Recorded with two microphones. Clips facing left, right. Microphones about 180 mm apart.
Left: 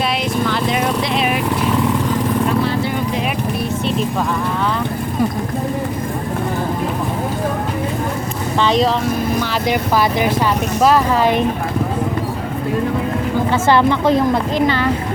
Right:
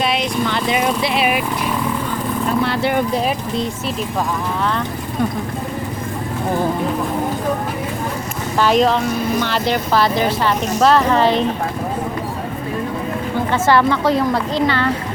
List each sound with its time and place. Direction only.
0.4 s vehicle: centre (ahead or behind)
2.6 s vehicle: 70° right (ahead or behind)
8.5 s speech: 5° right (ahead or behind)
9.4 s a woman's voice: 10° left (ahead or behind)
13.5 s a woman's voice: 15° left (ahead or behind)